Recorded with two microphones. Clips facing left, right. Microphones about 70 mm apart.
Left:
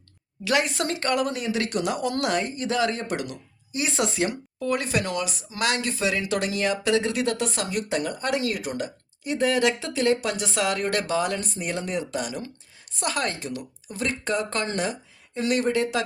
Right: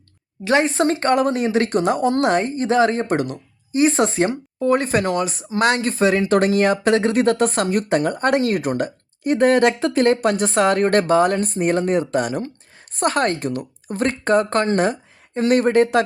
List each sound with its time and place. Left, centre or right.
0.4 s speech: right